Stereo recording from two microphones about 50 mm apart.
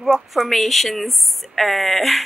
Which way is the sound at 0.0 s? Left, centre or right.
Centre.